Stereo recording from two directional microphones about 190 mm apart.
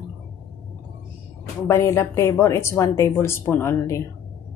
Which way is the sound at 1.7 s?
15° left (ahead or behind).